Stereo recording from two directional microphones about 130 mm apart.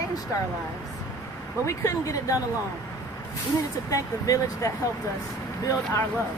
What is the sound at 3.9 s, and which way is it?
Speech, 25° left (ahead or behind).